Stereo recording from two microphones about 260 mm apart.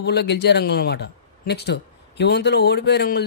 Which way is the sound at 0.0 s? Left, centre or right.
Left.